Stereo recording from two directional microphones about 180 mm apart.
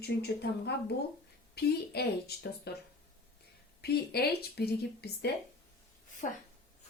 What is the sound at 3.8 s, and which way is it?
Speech, 60° left (ahead or behind).